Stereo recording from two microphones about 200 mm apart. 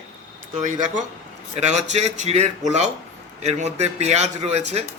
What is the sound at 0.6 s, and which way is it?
A man's voice, 40° right (ahead or behind).